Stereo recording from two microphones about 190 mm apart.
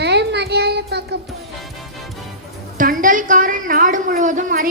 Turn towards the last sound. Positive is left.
turn(degrees=-45)  # may be behind; listen again after turning